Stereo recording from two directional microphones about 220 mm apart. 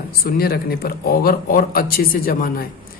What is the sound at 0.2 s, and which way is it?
Speech, 45° left (ahead or behind).